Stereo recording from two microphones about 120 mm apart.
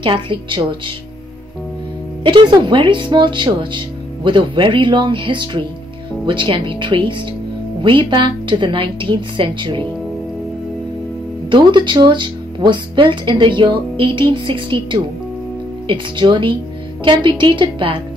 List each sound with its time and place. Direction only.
0.0 s speech: 45° right (ahead or behind)
2.2 s speech: 40° right (ahead or behind)
11.4 s speech: 40° right (ahead or behind)